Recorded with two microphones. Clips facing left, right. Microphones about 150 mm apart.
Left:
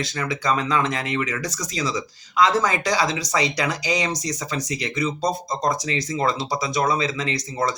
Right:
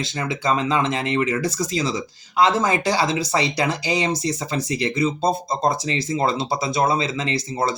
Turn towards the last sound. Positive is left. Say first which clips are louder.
# right 2 dB
turn(degrees=-30)  # may be behind; listen again after turning